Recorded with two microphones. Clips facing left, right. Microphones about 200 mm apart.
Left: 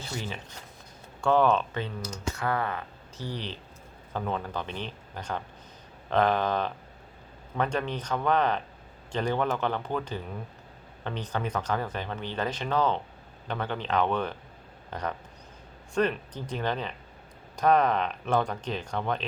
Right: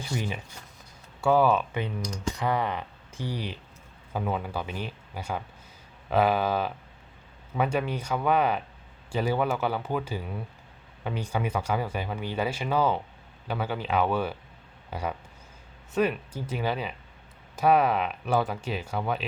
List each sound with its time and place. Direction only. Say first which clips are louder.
0.0 s speech: right 4 dB; 15° right (ahead or behind)
2.0 s speech: right 2 dB; 5° left (ahead or behind)
2.3 s speech: right 2 dB; 15° right (ahead or behind)